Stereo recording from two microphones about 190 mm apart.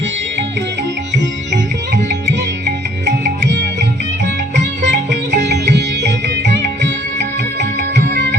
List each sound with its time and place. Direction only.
1.1 s music: 65° right (ahead or behind)